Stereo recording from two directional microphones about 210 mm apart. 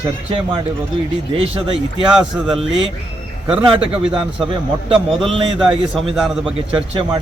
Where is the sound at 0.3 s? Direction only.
25° right (ahead or behind).